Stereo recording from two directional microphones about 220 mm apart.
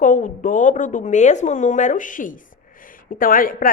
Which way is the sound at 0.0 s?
35° left (ahead or behind).